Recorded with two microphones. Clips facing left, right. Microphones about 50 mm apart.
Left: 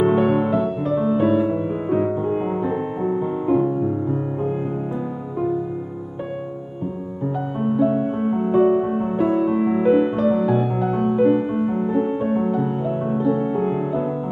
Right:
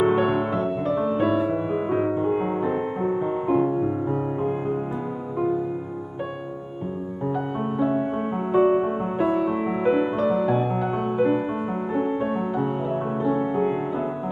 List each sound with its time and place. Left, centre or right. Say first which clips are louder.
0.0 s music: left 3 dB; centre
1.7 s music: left 2 dB; centre
2.3 s music: left 1 dB; centre
7.6 s music: left 6 dB; centre